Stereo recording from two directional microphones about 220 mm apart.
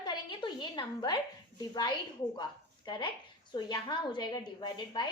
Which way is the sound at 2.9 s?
20° left (ahead or behind).